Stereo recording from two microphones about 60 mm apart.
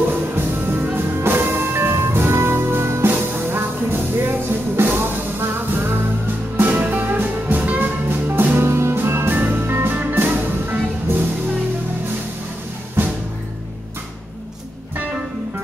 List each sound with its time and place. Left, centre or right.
0.1 s music: right
13.0 s music: right